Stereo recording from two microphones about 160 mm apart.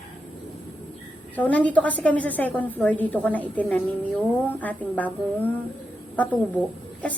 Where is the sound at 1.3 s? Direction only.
10° left (ahead or behind).